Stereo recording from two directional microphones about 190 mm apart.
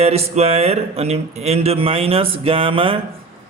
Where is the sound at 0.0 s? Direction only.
35° right (ahead or behind).